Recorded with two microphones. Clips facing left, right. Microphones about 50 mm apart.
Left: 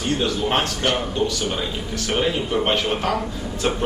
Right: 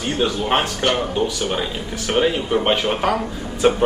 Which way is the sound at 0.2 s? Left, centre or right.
Centre.